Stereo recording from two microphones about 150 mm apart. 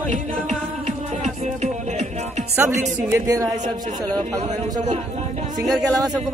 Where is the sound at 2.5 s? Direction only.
20° right (ahead or behind).